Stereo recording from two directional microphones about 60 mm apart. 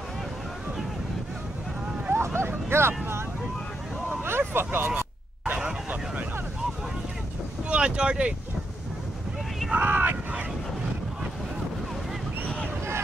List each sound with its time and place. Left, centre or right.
2.0 s bow-wow: right
4.2 s vehicle: right
5.6 s vehicle: centre
7.7 s boat: centre
9.7 s vehicle: right